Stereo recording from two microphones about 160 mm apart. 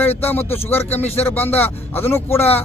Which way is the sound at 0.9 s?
40° left (ahead or behind).